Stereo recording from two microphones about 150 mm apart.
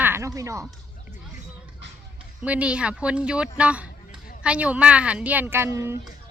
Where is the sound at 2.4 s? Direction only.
10° right (ahead or behind).